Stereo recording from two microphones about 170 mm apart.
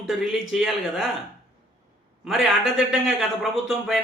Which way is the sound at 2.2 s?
Centre (ahead or behind).